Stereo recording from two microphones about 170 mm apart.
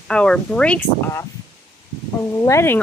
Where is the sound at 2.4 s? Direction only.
15° left (ahead or behind).